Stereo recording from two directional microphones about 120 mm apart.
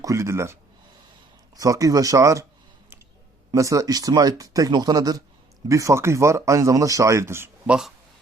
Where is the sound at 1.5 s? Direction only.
30° right (ahead or behind).